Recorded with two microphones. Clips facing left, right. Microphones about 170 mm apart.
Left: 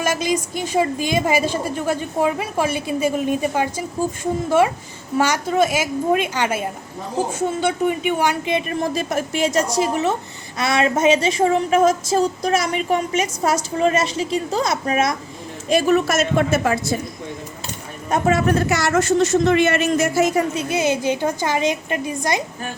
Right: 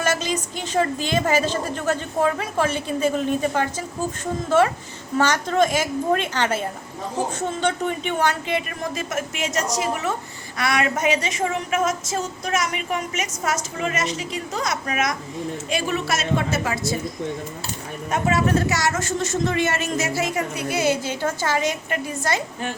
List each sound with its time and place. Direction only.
0.0 s a woman's voice: 10° left (ahead or behind)
8.8 s speech: 35° left (ahead or behind)
15.7 s a woman's voice: 45° left (ahead or behind)
18.1 s a man's voice: 50° left (ahead or behind)
20.5 s a woman's voice: 25° left (ahead or behind)